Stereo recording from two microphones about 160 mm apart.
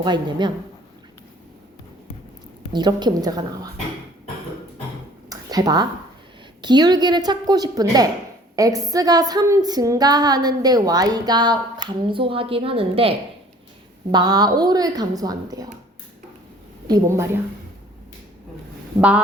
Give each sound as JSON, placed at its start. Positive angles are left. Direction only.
{"t": 0.0, "sound": "a woman's voice", "side_deg": -30}
{"t": 2.7, "sound": "a woman's voice", "side_deg": -25}
{"t": 5.3, "sound": "a sound", "side_deg": -25}
{"t": 6.6, "sound": "a woman's voice", "side_deg": -25}
{"t": 16.8, "sound": "a woman's voice", "side_deg": -20}
{"t": 18.9, "sound": "speech", "side_deg": -10}